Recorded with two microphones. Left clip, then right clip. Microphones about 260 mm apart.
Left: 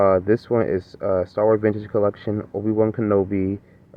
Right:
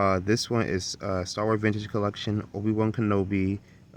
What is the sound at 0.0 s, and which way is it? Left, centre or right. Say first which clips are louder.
Speech: left 7 dB; right.